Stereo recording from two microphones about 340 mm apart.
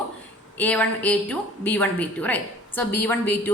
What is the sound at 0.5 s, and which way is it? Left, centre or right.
A woman's voice, centre.